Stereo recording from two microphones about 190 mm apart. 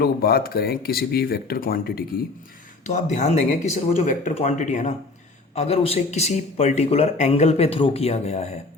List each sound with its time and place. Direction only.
0.0 s speech: 55° left (ahead or behind)
2.8 s speech: 40° left (ahead or behind)